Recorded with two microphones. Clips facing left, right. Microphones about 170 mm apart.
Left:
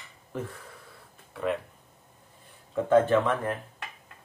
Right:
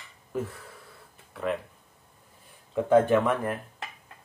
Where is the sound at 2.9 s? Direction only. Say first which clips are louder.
Right 1 dB; 15° right (ahead or behind).